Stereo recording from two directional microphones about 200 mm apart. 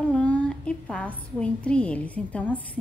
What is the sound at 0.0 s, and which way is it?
A woman's voice, 5° left (ahead or behind).